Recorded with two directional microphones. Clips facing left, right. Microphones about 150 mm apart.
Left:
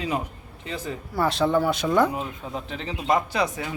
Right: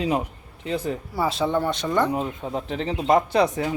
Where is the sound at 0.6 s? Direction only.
35° right (ahead or behind).